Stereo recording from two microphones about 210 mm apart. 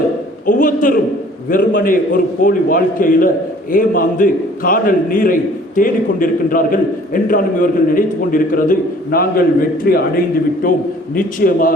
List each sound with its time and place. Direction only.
0.4 s a man's voice: 40° left (ahead or behind)